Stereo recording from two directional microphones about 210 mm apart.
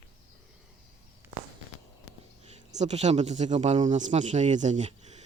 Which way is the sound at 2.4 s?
30° right (ahead or behind).